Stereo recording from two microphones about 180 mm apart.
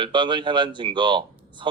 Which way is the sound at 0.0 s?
25° right (ahead or behind).